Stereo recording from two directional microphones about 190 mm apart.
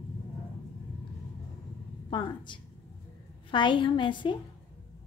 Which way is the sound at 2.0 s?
25° left (ahead or behind).